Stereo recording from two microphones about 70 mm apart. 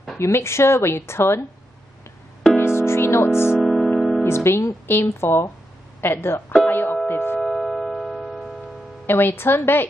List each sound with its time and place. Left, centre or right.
0.2 s a woman's voice: left
2.5 s music: left
3.5 s music: centre
4.2 s music: left
4.8 s a woman's voice: left
6.7 s music: left
7.4 s keyboard: centre
9.0 s a woman's voice: left